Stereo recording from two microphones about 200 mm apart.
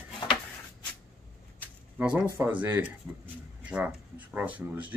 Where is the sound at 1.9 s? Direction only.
10° right (ahead or behind).